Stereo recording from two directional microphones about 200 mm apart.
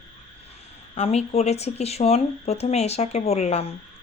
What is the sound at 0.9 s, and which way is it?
Speech, 30° left (ahead or behind).